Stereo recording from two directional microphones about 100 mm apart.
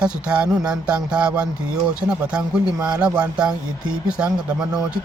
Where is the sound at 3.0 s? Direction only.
10° right (ahead or behind).